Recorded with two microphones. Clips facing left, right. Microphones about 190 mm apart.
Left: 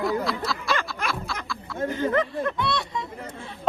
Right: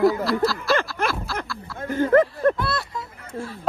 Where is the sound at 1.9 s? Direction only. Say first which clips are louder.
Right 8 dB; 50° right (ahead or behind).